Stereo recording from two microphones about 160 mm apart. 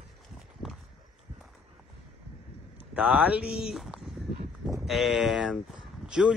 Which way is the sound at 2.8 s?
10° right (ahead or behind).